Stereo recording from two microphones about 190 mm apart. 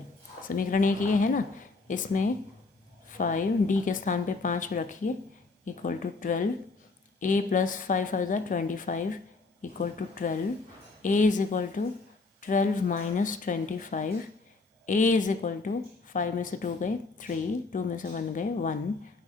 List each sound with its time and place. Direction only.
0.4 s a woman's voice: 45° left (ahead or behind)